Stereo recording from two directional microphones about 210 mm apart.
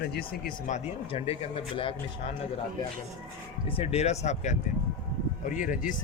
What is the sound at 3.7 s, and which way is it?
Speech, 30° left (ahead or behind).